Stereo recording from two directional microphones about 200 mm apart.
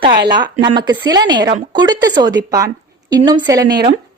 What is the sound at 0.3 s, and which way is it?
Speech, 20° right (ahead or behind).